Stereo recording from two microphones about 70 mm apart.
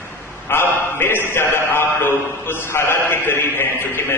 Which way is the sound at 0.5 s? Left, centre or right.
Left.